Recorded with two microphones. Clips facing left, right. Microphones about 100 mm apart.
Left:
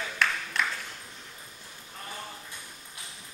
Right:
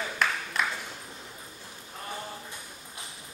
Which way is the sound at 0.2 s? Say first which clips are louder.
Even; 5° right (ahead or behind).